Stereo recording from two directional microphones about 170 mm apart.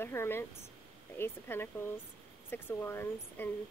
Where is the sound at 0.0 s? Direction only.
15° left (ahead or behind).